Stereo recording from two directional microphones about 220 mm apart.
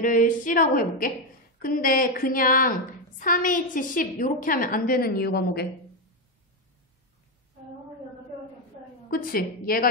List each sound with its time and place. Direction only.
0.0 s a woman's voice: 35° left (ahead or behind)
9.1 s a woman's voice: 40° left (ahead or behind)